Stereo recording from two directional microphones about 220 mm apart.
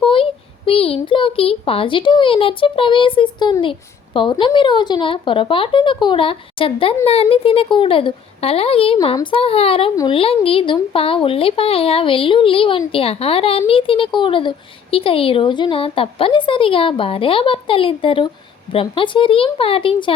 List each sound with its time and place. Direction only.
0.0 s a child's voice: 25° left (ahead or behind)